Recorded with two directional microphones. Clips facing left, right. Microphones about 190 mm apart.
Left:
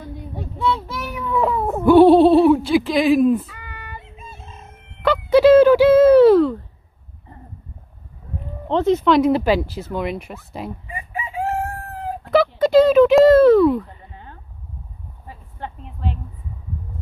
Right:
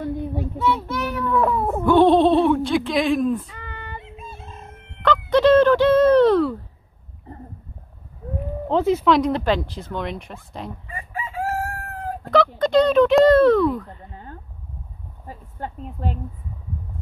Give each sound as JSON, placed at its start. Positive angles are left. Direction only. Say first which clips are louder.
{"t": 0.9, "sound": "speech", "louder": "right 1 dB", "side_deg": 10}
{"t": 3.4, "sound": "a sound", "louder": "right 2 dB", "side_deg": -30}
{"t": 4.2, "sound": "fowl", "louder": "right 2 dB", "side_deg": 0}
{"t": 8.6, "sound": "speech", "louder": "left 2 dB", "side_deg": -5}
{"t": 10.9, "sound": "crowing", "louder": "left 2 dB", "side_deg": 15}
{"t": 12.3, "sound": "speech", "louder": "left 2 dB", "side_deg": 5}
{"t": 14.1, "sound": "a sound", "louder": "right 3 dB", "side_deg": -40}